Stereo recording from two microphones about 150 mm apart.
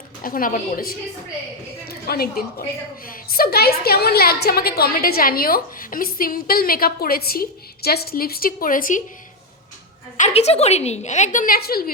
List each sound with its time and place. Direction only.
0.2 s a woman's voice: 70° left (ahead or behind)
1.9 s a woman's voice: 90° left; by 9.0 s 60° left (ahead or behind)
10.2 s a woman's voice: 45° left (ahead or behind); by 11.9 s 85° left